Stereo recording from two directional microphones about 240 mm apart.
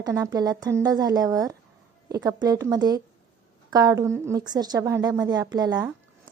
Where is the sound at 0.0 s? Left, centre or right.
Centre.